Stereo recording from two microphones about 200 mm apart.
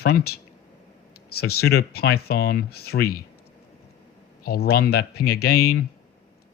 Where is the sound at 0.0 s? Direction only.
50° left (ahead or behind).